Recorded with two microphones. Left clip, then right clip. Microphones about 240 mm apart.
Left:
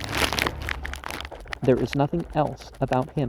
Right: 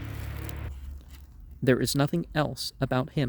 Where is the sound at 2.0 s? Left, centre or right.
Right.